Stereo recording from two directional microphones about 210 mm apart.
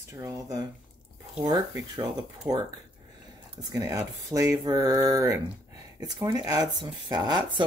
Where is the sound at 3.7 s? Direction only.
15° right (ahead or behind).